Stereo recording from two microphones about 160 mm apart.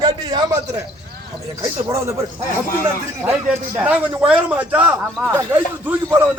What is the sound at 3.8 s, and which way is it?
Speech, 10° right (ahead or behind).